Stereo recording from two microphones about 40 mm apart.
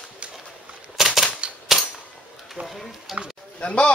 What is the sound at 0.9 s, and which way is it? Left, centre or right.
Typewriter, centre.